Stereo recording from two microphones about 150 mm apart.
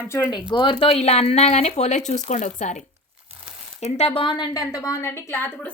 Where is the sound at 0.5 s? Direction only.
30° left (ahead or behind); by 2.8 s 55° left (ahead or behind).